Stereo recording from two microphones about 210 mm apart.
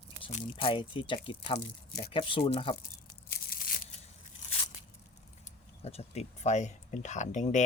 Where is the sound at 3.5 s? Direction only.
45° left (ahead or behind).